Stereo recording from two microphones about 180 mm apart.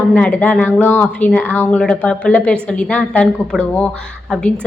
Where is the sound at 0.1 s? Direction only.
5° left (ahead or behind).